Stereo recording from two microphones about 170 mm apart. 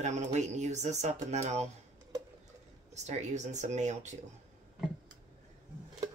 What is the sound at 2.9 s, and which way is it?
Speech, 40° right (ahead or behind).